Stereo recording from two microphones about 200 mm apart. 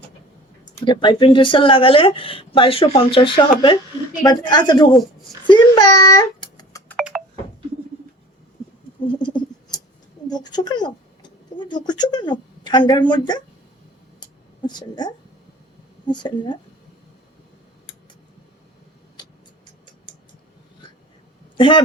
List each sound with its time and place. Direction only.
0.9 s a child's voice: 25° left (ahead or behind)
9.0 s a sound: 25° left (ahead or behind)
10.2 s speech: 20° left (ahead or behind)
14.7 s speech: 20° left (ahead or behind)
21.6 s speech: 25° left (ahead or behind)